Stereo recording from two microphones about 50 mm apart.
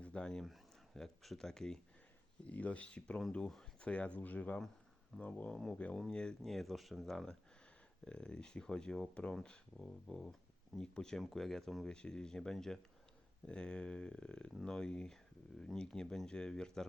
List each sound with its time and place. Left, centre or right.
0.0 s speech: left
0.4 s speech: centre
2.5 s speech: left
3.3 s speech: centre
3.8 s speech: left
5.1 s speech: centre
5.7 s speech: left
6.1 s speech: centre
6.4 s speech: centre
11.9 s speech: centre